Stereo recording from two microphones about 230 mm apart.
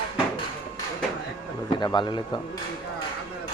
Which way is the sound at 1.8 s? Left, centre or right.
Centre.